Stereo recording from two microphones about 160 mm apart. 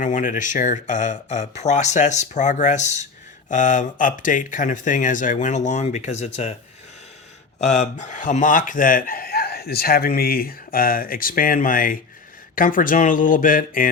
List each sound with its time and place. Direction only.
0.0 s speech: 55° left (ahead or behind)
7.6 s speech: 45° left (ahead or behind)